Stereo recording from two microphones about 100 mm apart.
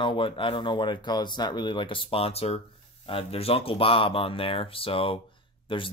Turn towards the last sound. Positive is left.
turn(degrees=60)  # may be behind; listen again after turning